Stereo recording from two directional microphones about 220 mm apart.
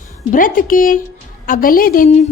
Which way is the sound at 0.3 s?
40° left (ahead or behind).